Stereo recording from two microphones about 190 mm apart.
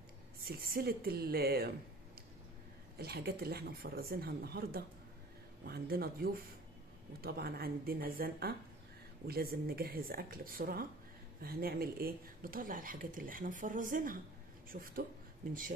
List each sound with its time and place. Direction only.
0.5 s speech: 50° right (ahead or behind)
3.0 s speech: 55° right (ahead or behind)